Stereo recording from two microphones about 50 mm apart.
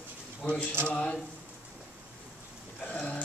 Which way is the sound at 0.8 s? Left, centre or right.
Left.